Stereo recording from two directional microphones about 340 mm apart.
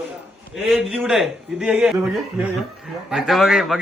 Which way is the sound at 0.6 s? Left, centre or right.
Centre.